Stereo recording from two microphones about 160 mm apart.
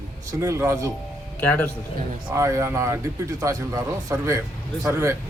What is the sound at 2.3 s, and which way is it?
A man's voice, 15° right (ahead or behind).